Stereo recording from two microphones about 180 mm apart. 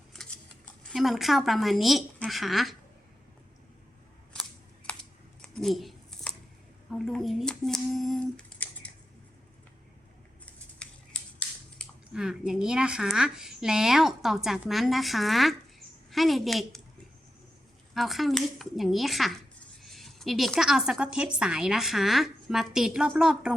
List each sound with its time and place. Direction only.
0.9 s speech: centre (ahead or behind)
4.9 s a sound: 5° left (ahead or behind)
6.9 s speech: centre (ahead or behind)
10.8 s speech: 5° left (ahead or behind)
17.9 s speech: centre (ahead or behind)